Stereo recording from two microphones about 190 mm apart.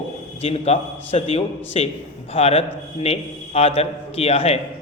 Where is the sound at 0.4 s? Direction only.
35° left (ahead or behind).